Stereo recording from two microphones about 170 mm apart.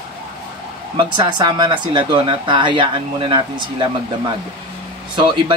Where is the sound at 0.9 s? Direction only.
30° right (ahead or behind).